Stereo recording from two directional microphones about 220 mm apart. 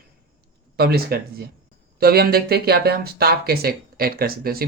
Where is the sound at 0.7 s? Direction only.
45° right (ahead or behind).